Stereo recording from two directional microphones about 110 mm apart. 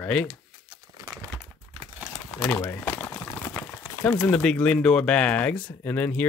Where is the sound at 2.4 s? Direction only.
20° left (ahead or behind).